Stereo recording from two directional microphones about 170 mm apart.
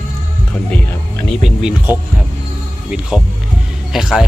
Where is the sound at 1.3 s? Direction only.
Centre (ahead or behind).